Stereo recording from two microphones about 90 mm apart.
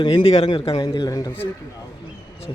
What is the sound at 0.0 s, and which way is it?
Speech, 60° left (ahead or behind).